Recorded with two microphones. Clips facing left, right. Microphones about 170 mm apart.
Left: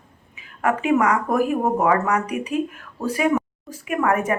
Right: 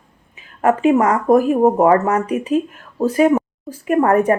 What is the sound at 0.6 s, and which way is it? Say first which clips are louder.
Speech: right 5 dB; 35° right (ahead or behind).